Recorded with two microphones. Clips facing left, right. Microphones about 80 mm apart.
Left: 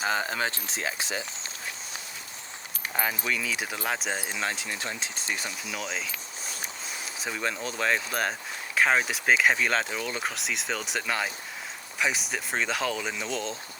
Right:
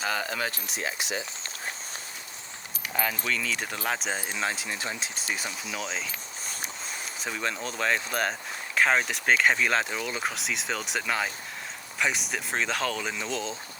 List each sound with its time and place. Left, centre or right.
0.0 s speech: left
2.9 s speech: centre
7.2 s speech: centre